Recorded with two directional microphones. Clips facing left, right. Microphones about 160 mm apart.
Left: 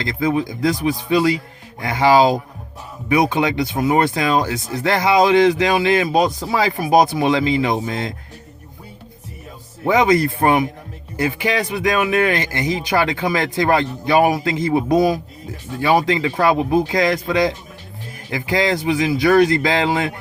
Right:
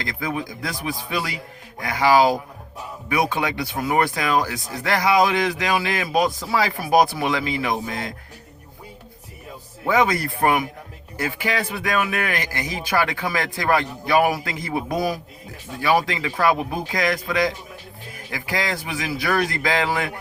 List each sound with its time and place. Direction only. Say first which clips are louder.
0.0 s speech: left 8 dB; 25° left (ahead or behind)
9.8 s speech: left 5 dB; 20° left (ahead or behind)